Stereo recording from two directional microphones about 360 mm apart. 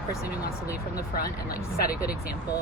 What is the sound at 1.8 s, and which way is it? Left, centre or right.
Speech, left.